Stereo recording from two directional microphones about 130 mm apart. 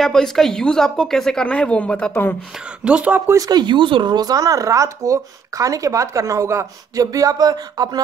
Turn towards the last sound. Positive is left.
turn(degrees=-30)  # may be behind; listen again after turning